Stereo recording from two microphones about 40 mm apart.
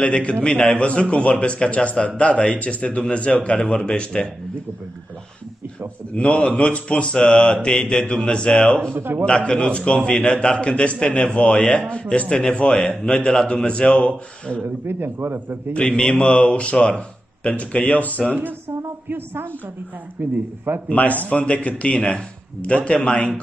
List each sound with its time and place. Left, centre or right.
0.0 s a man's voice: left
3.5 s a man's voice: centre
6.1 s a man's voice: left
7.1 s a man's voice: centre
8.9 s a man's voice: right
9.2 s a man's voice: left
12.3 s a man's voice: centre
13.7 s a man's voice: left
14.9 s speech: right
15.7 s a man's voice: left
19.0 s a woman's voice: right
20.7 s a man's voice: right
21.3 s a man's voice: left